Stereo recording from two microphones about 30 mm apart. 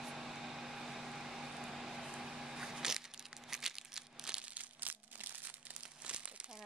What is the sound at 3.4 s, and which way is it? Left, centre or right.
Crumpling, centre.